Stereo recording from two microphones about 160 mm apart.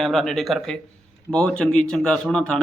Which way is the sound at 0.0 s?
Centre (ahead or behind).